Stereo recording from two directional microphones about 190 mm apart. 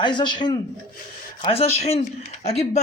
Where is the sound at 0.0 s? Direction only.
25° left (ahead or behind).